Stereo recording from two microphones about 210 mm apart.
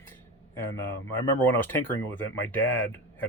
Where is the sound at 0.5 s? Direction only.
10° left (ahead or behind).